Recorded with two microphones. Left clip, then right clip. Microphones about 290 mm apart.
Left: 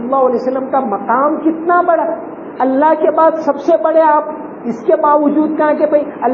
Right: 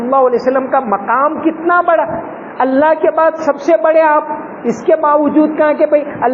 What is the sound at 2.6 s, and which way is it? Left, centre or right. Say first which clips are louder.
A man's voice: right 1 dB; right.